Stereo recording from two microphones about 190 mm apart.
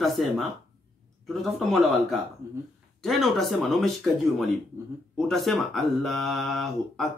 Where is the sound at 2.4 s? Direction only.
15° right (ahead or behind).